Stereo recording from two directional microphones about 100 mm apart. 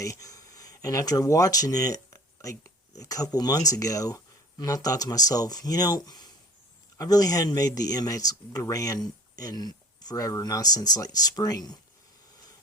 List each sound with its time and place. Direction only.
0.0 s speech: 35° left (ahead or behind)